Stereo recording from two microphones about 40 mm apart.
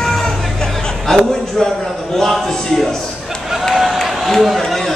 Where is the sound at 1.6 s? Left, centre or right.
Centre.